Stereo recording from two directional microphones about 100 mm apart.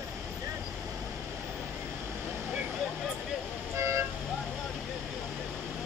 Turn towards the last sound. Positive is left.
turn(degrees=-30)  # may be behind; listen again after turning